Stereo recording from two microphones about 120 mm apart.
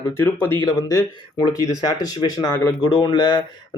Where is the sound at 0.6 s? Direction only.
35° left (ahead or behind).